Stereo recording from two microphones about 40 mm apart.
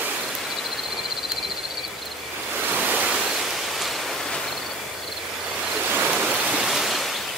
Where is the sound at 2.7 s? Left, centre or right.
Right.